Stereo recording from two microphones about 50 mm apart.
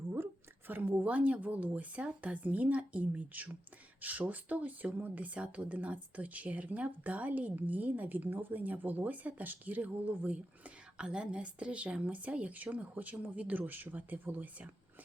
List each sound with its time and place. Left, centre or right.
0.7 s speech: right